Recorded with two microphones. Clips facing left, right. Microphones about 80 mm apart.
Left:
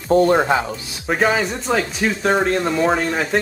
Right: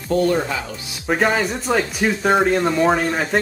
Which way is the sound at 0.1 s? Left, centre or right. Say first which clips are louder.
Left 4 dB; left.